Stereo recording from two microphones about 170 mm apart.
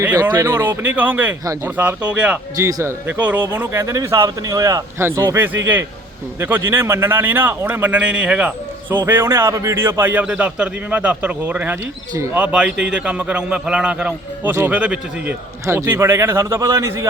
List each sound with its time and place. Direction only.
0.0 s speech: 10° right (ahead or behind)
2.6 s speech: 20° right (ahead or behind)
12.4 s a man's voice: 5° right (ahead or behind)